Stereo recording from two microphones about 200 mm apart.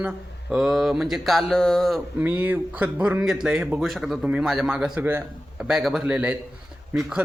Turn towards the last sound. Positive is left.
turn(degrees=-5)  # may be behind; listen again after turning